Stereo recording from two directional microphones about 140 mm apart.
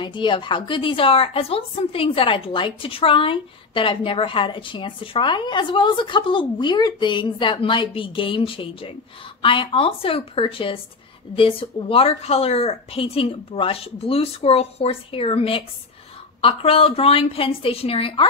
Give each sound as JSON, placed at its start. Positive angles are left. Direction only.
{"t": 0.0, "sound": "a woman's voice", "side_deg": 35}